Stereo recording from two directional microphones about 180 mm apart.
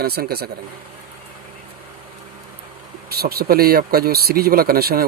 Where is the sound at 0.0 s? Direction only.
60° right (ahead or behind).